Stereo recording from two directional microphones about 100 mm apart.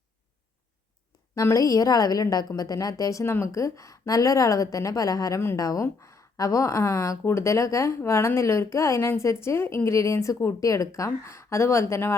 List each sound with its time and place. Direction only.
1.4 s a woman's voice: 35° left (ahead or behind)